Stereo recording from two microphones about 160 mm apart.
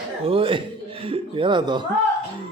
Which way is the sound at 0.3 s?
35° right (ahead or behind).